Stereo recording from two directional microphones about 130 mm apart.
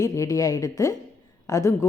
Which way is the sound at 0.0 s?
25° left (ahead or behind).